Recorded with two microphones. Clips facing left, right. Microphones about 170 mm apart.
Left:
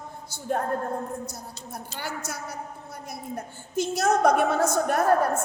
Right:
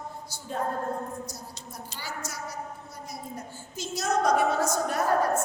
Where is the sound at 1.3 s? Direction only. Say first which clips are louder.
Left 3 dB; 60° left (ahead or behind).